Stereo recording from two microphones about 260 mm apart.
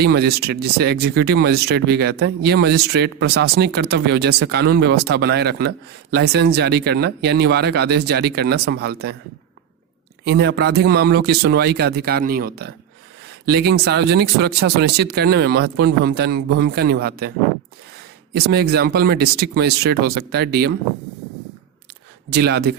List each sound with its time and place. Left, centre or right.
0.0 s speech: right
10.2 s speech: right
18.3 s speech: right
22.3 s speech: right